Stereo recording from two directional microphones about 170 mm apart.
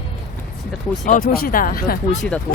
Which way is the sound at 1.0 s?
55° left (ahead or behind).